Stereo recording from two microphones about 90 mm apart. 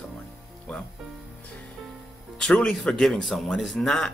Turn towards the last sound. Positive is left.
turn(degrees=5)  # may be behind; listen again after turning